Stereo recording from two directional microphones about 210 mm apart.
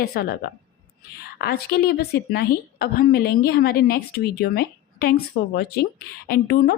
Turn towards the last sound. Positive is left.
turn(degrees=45)  # may be behind; listen again after turning